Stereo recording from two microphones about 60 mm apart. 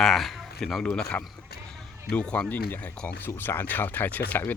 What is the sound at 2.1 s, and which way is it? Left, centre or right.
Speech, left.